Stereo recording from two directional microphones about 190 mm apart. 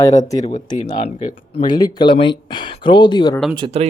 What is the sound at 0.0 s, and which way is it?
Speech, 15° left (ahead or behind).